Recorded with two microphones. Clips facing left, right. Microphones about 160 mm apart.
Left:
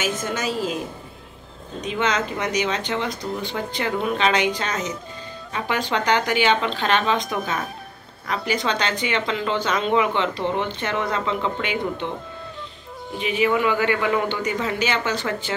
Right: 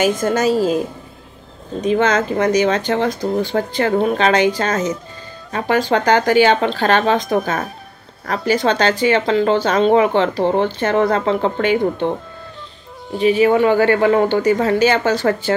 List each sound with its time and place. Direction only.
0.0 s a woman's voice: 45° right (ahead or behind)
1.9 s a woman's voice: 45° right (ahead or behind)
13.2 s speech: 35° right (ahead or behind)